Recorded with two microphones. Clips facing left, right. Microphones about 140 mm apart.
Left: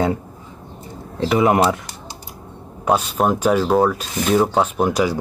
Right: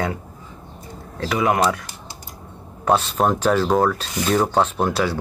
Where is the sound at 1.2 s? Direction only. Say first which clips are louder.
Left 4 dB; 25° left (ahead or behind).